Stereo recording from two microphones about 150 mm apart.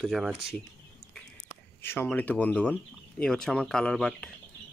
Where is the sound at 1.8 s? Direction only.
15° left (ahead or behind).